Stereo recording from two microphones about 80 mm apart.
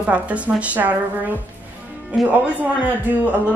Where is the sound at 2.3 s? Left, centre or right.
Right.